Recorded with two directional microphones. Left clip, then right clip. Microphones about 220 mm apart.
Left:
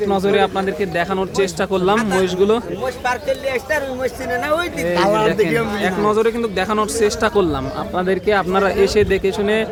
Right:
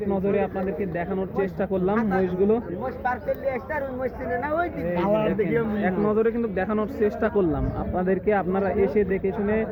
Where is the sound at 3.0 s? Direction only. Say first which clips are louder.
Left 5 dB; 90° left.